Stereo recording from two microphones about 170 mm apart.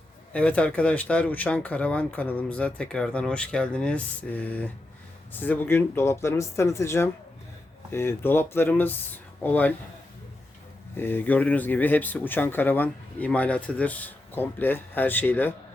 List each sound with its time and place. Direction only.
0.3 s speech: 5° left (ahead or behind)
10.9 s speech: 10° left (ahead or behind)